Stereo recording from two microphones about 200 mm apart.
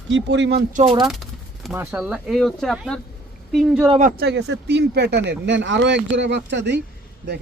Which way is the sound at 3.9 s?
35° right (ahead or behind).